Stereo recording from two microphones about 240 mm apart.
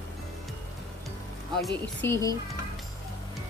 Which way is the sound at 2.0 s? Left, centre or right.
Centre.